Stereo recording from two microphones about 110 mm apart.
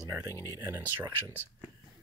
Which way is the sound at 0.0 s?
30° right (ahead or behind).